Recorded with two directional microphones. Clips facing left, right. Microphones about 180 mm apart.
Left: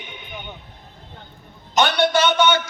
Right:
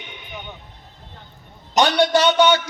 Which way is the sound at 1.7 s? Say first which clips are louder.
Right 2 dB; 35° right (ahead or behind).